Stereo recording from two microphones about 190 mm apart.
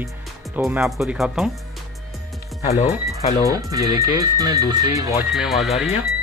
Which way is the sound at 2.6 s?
35° left (ahead or behind).